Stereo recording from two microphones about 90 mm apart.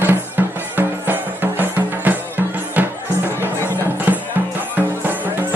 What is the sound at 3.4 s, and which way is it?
Music, 20° right (ahead or behind).